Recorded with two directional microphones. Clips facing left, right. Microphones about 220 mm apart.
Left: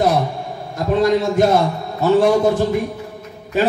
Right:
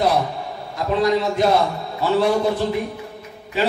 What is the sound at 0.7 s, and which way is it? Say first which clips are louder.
A man's voice: left 3 dB; 50° left (ahead or behind).